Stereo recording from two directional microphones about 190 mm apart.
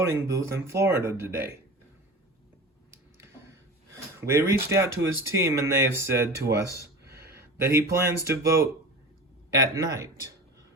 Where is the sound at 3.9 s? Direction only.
15° right (ahead or behind).